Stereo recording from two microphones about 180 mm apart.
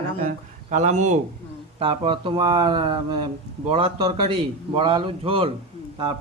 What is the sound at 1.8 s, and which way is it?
A man's voice, 30° right (ahead or behind).